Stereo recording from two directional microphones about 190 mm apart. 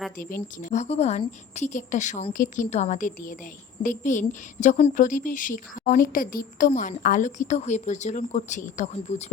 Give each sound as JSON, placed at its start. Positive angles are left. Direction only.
{"t": 0.6, "sound": "a woman's voice", "side_deg": 40}